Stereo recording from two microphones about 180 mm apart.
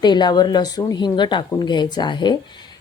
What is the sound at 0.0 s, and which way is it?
Speech, 25° left (ahead or behind).